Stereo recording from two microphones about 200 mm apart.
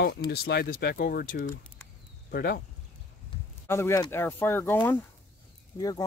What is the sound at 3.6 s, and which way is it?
Speech, 15° left (ahead or behind).